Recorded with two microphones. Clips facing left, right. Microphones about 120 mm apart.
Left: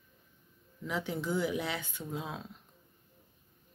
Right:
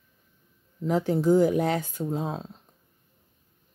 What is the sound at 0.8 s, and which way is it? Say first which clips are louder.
Speech: right 12 dB; 40° right (ahead or behind).